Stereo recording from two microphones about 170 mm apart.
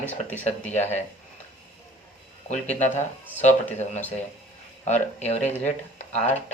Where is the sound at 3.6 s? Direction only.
10° left (ahead or behind).